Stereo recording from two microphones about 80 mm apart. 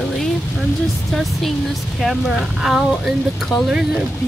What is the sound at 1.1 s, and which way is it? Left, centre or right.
Speech, centre.